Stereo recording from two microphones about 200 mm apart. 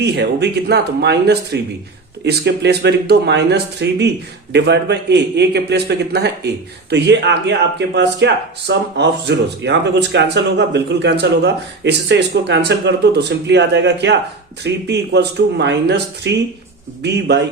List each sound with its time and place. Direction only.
0.0 s speech: 55° right (ahead or behind)